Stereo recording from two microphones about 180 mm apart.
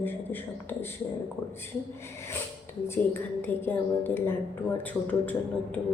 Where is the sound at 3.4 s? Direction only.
10° left (ahead or behind).